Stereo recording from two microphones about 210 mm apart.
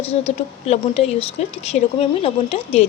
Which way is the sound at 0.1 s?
30° left (ahead or behind).